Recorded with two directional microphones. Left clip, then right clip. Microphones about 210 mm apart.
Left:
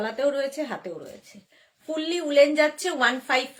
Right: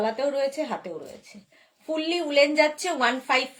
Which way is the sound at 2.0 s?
15° left (ahead or behind).